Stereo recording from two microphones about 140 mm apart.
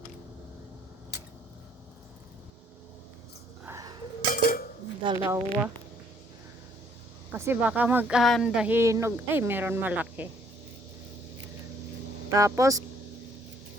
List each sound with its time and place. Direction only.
3.7 s a sound: 25° right (ahead or behind)
4.4 s dishes: 90° left
5.2 s speech: 15° right (ahead or behind)
7.3 s speech: 15° right (ahead or behind)
12.3 s speech: 20° right (ahead or behind)